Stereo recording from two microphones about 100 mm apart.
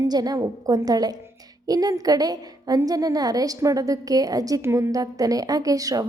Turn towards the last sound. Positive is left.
turn(degrees=-35)  # may be behind; listen again after turning